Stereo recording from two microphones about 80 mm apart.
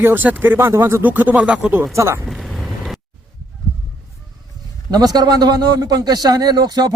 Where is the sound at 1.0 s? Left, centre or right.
Right.